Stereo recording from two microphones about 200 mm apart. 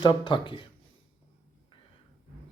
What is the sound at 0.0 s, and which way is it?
Speech, 25° left (ahead or behind).